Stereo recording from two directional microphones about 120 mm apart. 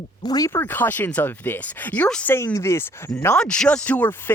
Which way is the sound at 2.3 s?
20° left (ahead or behind).